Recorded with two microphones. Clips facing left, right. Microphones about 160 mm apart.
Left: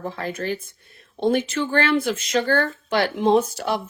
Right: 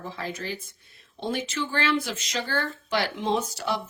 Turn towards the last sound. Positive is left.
turn(degrees=55)  # may be behind; listen again after turning